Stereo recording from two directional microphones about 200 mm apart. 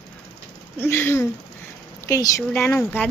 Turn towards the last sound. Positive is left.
turn(degrees=10)  # may be behind; listen again after turning